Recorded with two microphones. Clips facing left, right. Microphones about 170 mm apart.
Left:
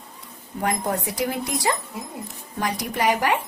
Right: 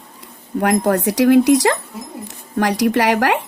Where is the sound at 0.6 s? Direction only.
85° right.